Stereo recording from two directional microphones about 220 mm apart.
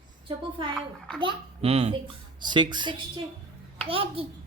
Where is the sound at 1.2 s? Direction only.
25° right (ahead or behind).